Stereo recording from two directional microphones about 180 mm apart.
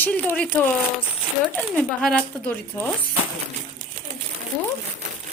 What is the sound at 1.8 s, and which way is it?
A woman's voice, 5° left (ahead or behind).